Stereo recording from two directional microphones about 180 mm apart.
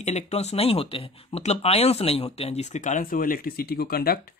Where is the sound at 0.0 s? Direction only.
40° left (ahead or behind).